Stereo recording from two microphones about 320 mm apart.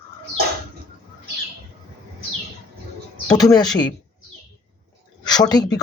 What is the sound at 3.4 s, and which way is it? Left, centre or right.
Speech, centre.